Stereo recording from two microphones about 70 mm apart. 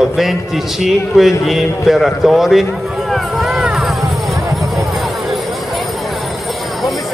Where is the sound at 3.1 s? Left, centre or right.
Centre.